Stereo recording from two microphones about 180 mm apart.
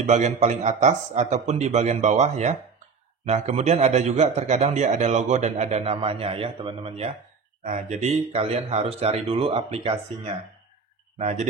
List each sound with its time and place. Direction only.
0.0 s a man's voice: 40° right (ahead or behind)